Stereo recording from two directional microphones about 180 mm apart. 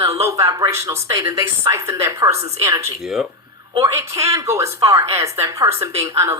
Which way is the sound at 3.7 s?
20° right (ahead or behind).